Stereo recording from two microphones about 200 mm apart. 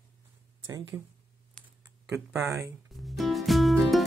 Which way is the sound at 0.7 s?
15° right (ahead or behind).